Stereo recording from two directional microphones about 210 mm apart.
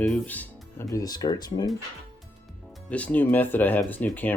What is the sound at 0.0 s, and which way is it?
Speech, 5° left (ahead or behind).